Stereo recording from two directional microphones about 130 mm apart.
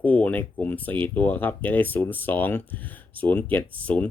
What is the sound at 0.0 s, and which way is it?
Speech, 10° left (ahead or behind).